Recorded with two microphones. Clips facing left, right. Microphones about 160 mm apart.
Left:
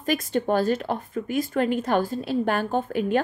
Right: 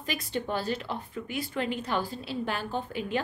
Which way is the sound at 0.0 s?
45° left (ahead or behind).